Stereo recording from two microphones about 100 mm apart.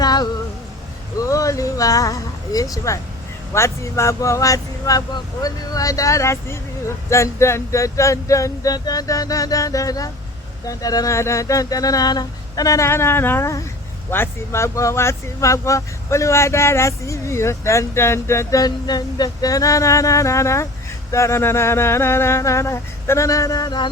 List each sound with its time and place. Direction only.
0.0 s music: 45° left (ahead or behind)
1.2 s a sound: 35° left (ahead or behind)
3.5 s speech: 30° left (ahead or behind)
18.6 s speech: 40° left (ahead or behind)